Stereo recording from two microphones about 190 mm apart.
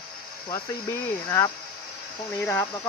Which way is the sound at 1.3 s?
20° left (ahead or behind).